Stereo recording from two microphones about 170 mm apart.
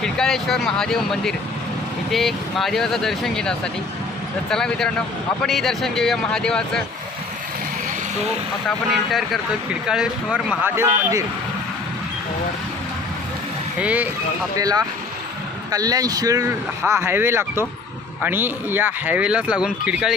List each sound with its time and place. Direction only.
0.0 s speech: centre (ahead or behind)
8.9 s speech: centre (ahead or behind)
13.7 s speech: 10° right (ahead or behind)
14.6 s speech: 20° right (ahead or behind); by 20.1 s 5° right (ahead or behind)